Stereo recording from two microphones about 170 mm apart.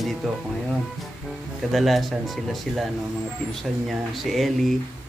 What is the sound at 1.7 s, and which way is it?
Speech, centre (ahead or behind).